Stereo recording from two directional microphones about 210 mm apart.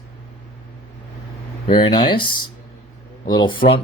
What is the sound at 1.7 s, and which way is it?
Speech, 20° left (ahead or behind).